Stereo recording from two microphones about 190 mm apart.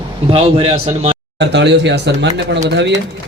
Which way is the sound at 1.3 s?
65° right (ahead or behind).